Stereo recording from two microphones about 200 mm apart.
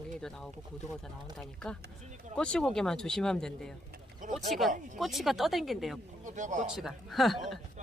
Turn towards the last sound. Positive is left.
turn(degrees=0)  # may be behind; listen again after turning